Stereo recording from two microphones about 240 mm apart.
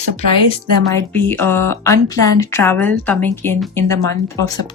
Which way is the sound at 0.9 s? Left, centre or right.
Centre.